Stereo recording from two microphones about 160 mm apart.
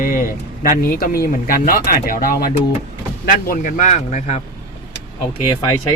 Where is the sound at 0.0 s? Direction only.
60° left (ahead or behind).